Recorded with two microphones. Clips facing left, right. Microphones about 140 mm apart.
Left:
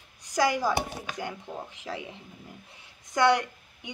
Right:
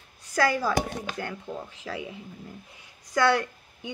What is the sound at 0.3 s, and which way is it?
A woman's voice, 15° left (ahead or behind).